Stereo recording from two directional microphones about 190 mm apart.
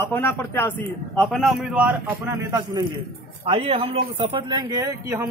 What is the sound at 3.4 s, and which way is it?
Speech, 30° right (ahead or behind).